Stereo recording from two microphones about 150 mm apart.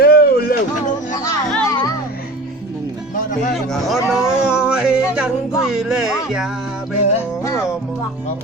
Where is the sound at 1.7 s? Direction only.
25° left (ahead or behind).